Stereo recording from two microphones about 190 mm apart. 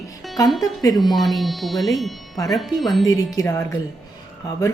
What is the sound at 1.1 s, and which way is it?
Speech, centre (ahead or behind).